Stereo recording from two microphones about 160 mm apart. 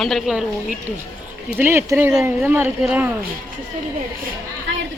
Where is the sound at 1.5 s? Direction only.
15° right (ahead or behind).